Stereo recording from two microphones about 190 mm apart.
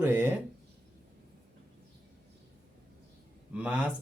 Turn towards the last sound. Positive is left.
turn(degrees=-5)  # may be behind; listen again after turning